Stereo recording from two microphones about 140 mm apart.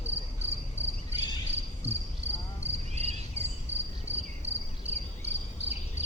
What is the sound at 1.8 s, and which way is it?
Cricket, 50° right (ahead or behind).